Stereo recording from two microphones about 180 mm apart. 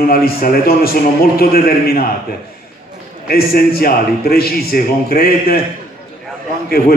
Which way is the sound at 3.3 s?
55° left (ahead or behind).